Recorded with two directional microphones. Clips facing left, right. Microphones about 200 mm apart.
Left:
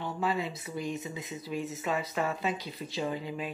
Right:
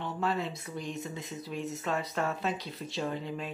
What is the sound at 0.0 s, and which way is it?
Speech, 5° left (ahead or behind).